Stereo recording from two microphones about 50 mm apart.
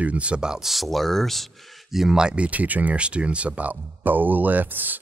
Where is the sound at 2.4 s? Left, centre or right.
Right.